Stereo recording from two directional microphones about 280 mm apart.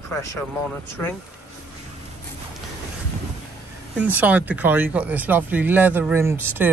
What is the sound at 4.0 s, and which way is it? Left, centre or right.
Speech, centre.